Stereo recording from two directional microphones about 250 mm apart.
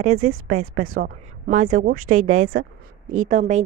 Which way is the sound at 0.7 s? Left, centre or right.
Right.